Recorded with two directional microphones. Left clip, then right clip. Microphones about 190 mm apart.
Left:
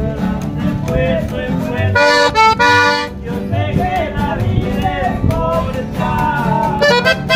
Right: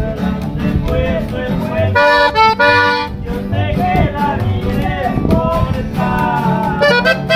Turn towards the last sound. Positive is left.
turn(degrees=40)  # may be behind; listen again after turning